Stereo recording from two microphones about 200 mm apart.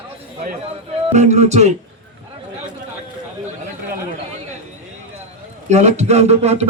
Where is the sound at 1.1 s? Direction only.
35° right (ahead or behind).